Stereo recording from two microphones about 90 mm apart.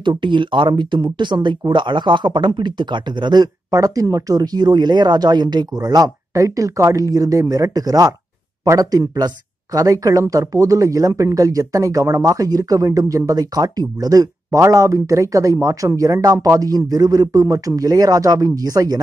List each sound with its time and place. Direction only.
0.2 s speech: 65° right (ahead or behind); by 18.9 s 40° right (ahead or behind)